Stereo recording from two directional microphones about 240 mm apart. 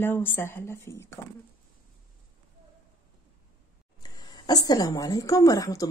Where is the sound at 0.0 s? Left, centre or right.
Centre.